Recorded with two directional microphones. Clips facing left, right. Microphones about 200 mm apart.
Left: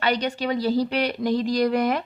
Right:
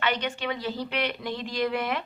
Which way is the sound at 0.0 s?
40° left (ahead or behind).